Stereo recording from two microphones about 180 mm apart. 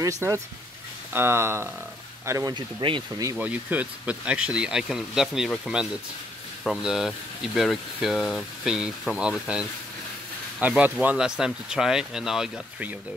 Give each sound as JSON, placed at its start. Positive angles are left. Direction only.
{"t": 0.0, "sound": "speech", "side_deg": -15}
{"t": 3.3, "sound": "speech", "side_deg": -10}